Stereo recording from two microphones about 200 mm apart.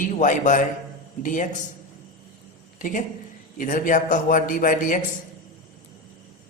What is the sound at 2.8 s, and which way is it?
A man's voice, 40° left (ahead or behind).